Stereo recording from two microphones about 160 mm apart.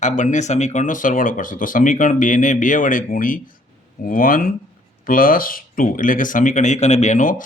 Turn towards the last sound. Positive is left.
turn(degrees=55)  # may be behind; listen again after turning